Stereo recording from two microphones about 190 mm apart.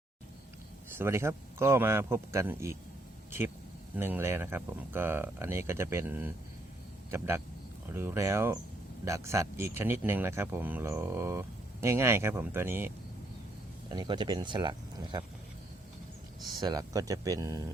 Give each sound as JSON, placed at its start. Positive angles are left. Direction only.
{"t": 0.9, "sound": "speech", "side_deg": -15}
{"t": 3.9, "sound": "speech", "side_deg": -10}
{"t": 13.9, "sound": "speech", "side_deg": -25}
{"t": 16.6, "sound": "speech", "side_deg": -20}